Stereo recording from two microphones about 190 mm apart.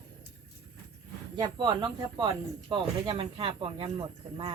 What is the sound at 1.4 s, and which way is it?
Speech, 25° right (ahead or behind).